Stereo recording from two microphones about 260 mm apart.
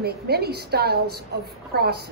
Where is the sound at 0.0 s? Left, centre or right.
Right.